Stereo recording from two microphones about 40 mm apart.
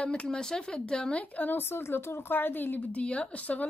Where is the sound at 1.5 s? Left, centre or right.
Left.